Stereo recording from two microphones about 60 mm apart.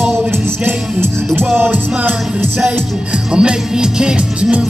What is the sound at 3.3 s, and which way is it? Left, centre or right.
Music, centre.